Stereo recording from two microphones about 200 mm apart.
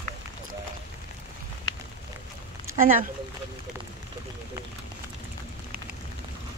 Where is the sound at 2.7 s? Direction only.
40° right (ahead or behind).